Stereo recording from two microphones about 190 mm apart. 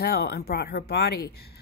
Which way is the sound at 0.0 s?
55° left (ahead or behind).